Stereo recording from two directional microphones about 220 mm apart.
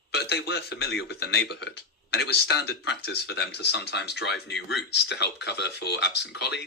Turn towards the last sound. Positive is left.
turn(degrees=50)  # may be behind; listen again after turning